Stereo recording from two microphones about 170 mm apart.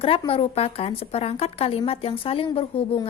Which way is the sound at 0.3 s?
35° left (ahead or behind).